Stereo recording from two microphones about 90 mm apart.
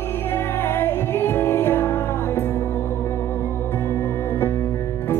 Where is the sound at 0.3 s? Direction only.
25° left (ahead or behind).